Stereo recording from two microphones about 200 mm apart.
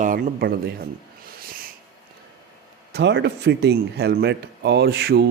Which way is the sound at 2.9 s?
55° right (ahead or behind).